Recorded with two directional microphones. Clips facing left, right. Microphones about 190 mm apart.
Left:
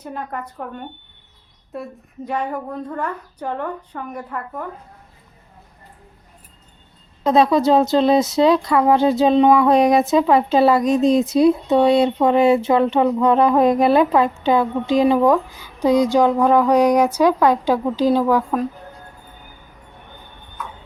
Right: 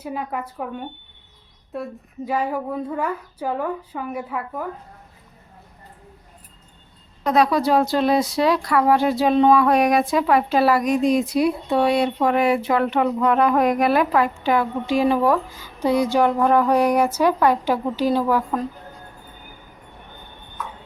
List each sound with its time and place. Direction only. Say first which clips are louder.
0.0 s speech: right 1 dB; 5° right (ahead or behind)
7.3 s a woman's voice: left 3 dB; 25° left (ahead or behind)